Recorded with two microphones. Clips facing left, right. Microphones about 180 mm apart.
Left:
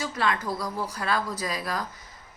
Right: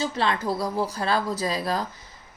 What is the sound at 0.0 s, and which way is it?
Speech, 30° right (ahead or behind).